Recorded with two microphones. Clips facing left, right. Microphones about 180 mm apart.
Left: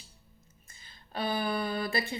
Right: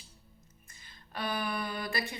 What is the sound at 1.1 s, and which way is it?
Speech, 30° left (ahead or behind).